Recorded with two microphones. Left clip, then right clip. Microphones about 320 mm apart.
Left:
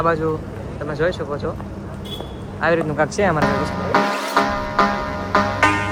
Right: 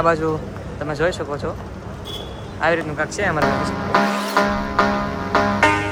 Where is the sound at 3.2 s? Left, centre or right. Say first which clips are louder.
Right 1 dB; centre.